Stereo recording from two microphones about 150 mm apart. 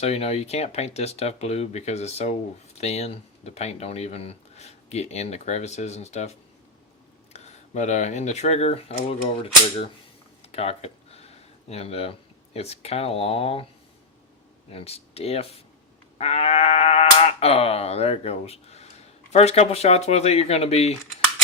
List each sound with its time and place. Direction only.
0.0 s speech: 45° left (ahead or behind)
7.3 s speech: 50° left (ahead or behind)
10.5 s a sound: 45° left (ahead or behind)
12.5 s speech: 45° left (ahead or behind)
14.7 s speech: 40° left (ahead or behind)